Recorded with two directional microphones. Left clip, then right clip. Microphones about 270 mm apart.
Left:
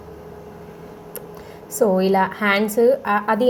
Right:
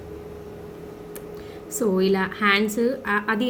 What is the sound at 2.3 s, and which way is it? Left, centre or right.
A woman's voice, centre.